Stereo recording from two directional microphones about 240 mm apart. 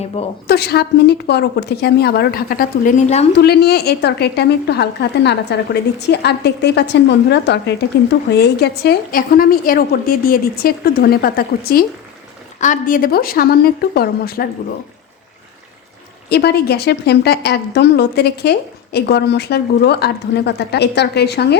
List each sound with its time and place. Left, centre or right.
0.4 s a woman's voice: left
3.3 s a woman's voice: left
16.3 s a woman's voice: left